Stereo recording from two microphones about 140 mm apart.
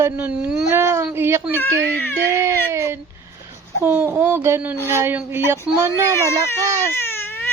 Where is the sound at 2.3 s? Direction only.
20° right (ahead or behind).